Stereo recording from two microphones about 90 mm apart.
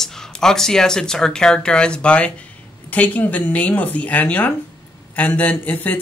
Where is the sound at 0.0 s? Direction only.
5° left (ahead or behind).